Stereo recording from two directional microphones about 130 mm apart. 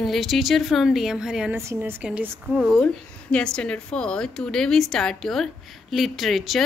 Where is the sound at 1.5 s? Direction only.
20° right (ahead or behind); by 2.8 s 5° right (ahead or behind).